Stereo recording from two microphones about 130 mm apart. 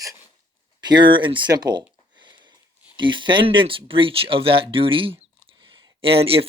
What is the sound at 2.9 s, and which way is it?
Speech, 40° right (ahead or behind).